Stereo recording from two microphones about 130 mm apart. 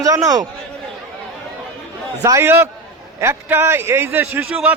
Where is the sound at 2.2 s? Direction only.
20° right (ahead or behind).